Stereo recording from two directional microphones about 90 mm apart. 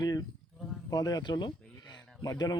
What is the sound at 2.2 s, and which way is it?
Speech, 40° left (ahead or behind).